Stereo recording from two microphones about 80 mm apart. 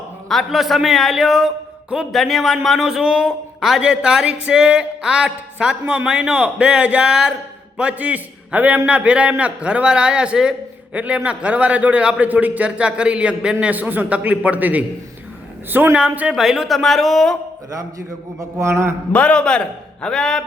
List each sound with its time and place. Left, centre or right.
0.3 s a man's voice: centre; by 16.0 s right
16.0 s a man's voice: centre
18.6 s a man's voice: right
19.1 s a man's voice: centre